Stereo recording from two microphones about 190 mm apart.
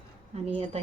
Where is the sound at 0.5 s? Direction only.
35° right (ahead or behind).